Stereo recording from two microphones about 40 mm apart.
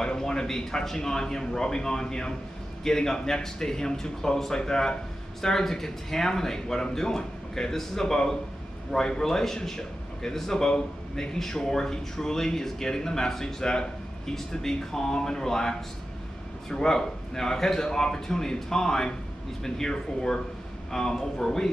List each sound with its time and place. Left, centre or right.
0.0 s a man's voice: centre
16.7 s a man's voice: centre